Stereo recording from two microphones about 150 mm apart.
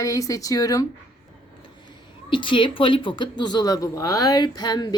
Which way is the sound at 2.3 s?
35° left (ahead or behind).